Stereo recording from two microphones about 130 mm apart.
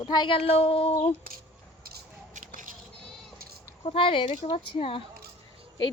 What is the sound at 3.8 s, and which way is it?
A woman's voice, 45° left (ahead or behind).